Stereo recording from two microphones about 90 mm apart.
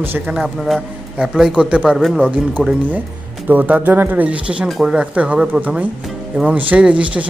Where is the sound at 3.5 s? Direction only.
20° right (ahead or behind).